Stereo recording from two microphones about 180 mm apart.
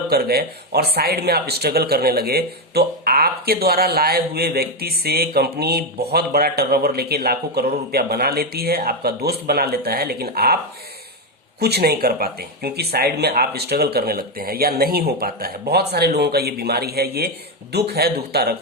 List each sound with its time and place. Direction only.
0.1 s speech: 60° right (ahead or behind)
11.6 s speech: 60° right (ahead or behind)